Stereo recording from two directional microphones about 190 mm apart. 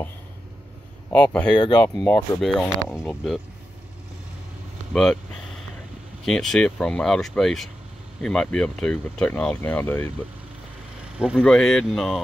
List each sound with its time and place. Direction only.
1.1 s speech: 5° left (ahead or behind)
1.5 s speech: 25° left (ahead or behind)
2.4 s speech: centre (ahead or behind)
6.2 s speech: centre (ahead or behind)
11.1 s speech: 5° right (ahead or behind)